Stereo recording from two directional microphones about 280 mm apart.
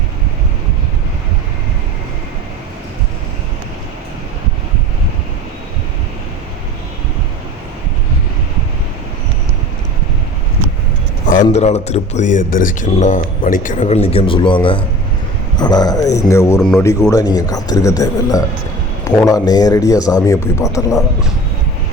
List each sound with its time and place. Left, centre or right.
11.3 s a man's voice: left